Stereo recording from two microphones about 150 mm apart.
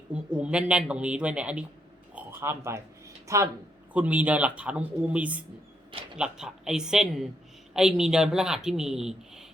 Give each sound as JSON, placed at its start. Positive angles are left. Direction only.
{"t": 0.1, "sound": "speech", "side_deg": -5}
{"t": 2.1, "sound": "a sound", "side_deg": -15}
{"t": 3.2, "sound": "speech", "side_deg": -20}
{"t": 3.9, "sound": "speech", "side_deg": -10}